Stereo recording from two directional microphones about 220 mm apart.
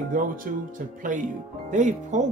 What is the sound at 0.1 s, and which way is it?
Speech, 35° right (ahead or behind).